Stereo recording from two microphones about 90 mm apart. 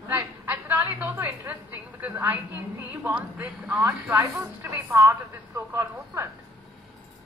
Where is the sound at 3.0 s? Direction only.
15° right (ahead or behind).